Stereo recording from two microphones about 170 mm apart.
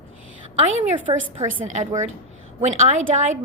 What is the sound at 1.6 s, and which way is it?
A woman's voice, 45° right (ahead or behind).